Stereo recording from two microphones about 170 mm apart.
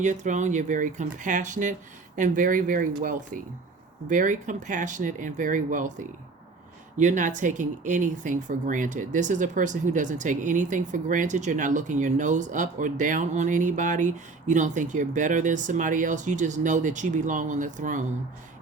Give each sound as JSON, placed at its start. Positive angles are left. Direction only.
{"t": 0.0, "sound": "speech", "side_deg": -45}